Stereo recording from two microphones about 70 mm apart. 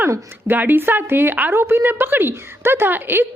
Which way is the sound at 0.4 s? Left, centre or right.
Right.